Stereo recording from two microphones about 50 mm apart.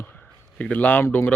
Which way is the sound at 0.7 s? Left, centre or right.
Left.